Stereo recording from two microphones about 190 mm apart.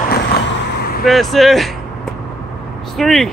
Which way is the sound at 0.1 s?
55° left (ahead or behind).